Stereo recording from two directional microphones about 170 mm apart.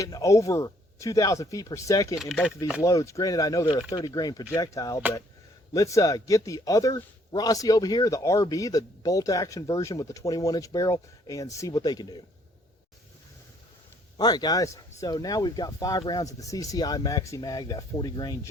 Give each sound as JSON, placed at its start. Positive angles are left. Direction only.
{"t": 0.0, "sound": "a man's voice", "side_deg": 20}
{"t": 14.2, "sound": "a man's voice", "side_deg": 25}